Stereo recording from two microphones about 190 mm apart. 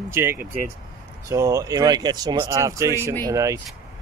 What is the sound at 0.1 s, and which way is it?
Speech, 15° right (ahead or behind).